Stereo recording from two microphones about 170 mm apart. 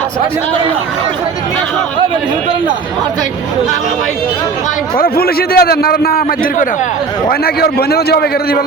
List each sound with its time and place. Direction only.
4.9 s a man's voice: 60° left (ahead or behind)